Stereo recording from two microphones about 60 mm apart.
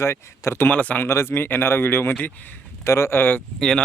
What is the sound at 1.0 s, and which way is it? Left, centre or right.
Speech, left.